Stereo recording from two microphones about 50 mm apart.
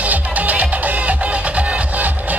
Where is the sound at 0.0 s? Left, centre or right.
Right.